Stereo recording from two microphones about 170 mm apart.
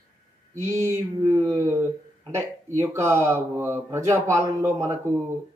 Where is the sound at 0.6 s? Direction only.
15° right (ahead or behind).